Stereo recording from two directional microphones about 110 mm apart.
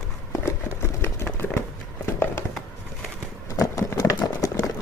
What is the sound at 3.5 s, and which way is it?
Horse, 30° left (ahead or behind).